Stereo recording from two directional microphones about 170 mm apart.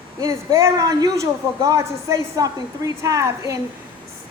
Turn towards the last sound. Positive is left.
turn(degrees=-20)  # may be behind; listen again after turning